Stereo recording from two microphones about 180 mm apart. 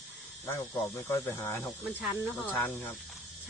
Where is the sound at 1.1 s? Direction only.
15° left (ahead or behind).